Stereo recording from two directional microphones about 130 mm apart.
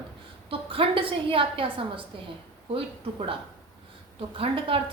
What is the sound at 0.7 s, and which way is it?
A woman's voice, 45° right (ahead or behind).